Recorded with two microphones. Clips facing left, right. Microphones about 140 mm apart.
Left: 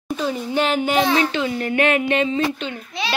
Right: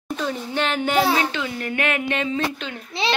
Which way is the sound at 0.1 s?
5° left (ahead or behind).